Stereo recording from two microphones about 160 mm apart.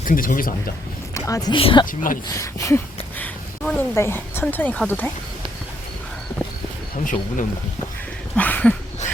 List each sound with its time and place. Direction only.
0.0 s speech: 55° left (ahead or behind)
1.1 s speech: 20° left (ahead or behind)
1.9 s speech: 60° left (ahead or behind)
2.3 s a sound: 20° left (ahead or behind)
3.6 s speech: 15° left (ahead or behind)
6.9 s speech: 55° left (ahead or behind)
8.4 s a sound: 10° left (ahead or behind)